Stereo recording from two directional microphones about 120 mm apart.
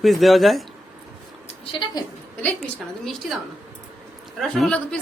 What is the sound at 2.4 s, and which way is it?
Speech, 15° left (ahead or behind).